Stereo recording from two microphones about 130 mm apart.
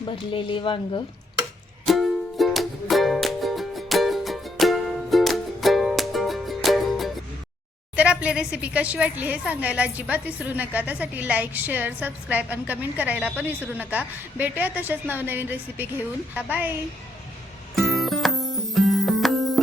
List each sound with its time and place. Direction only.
0.3 s speech: 40° left (ahead or behind)
1.9 s music: centre (ahead or behind)
7.9 s a woman's voice: 10° right (ahead or behind)
17.7 s music: centre (ahead or behind)